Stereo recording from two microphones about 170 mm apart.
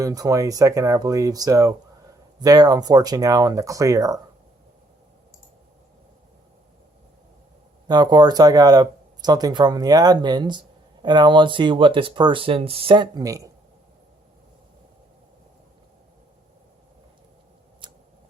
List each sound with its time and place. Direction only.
0.0 s speech: 20° right (ahead or behind)
7.9 s speech: 25° right (ahead or behind)